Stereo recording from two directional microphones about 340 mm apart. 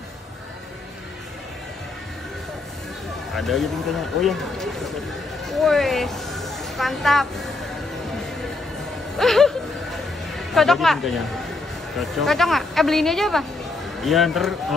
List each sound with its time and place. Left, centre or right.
3.3 s a woman's voice: centre
4.2 s a sound: centre
9.2 s a woman's voice: centre